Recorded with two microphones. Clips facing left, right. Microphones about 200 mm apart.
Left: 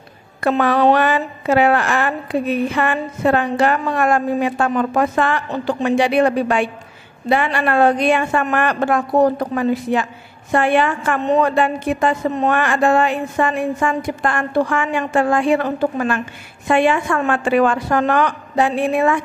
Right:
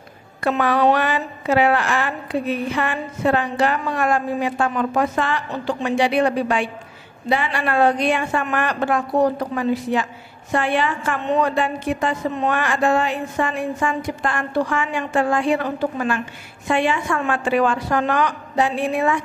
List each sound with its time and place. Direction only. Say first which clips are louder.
0.4 s a woman's voice: left 3 dB; 45° left (ahead or behind)